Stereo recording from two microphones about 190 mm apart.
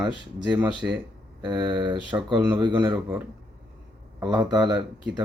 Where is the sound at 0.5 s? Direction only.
5° right (ahead or behind).